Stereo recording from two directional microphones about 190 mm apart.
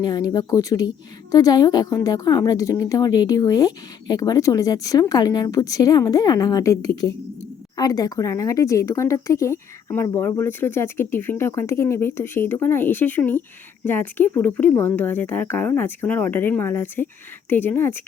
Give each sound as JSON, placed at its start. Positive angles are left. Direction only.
{"t": 0.0, "sound": "a woman's voice", "side_deg": 20}